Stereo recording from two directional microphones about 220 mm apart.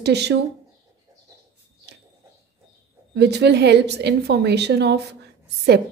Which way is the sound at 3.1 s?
50° right (ahead or behind).